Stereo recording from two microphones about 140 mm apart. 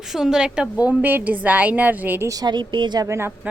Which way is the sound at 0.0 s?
5° right (ahead or behind).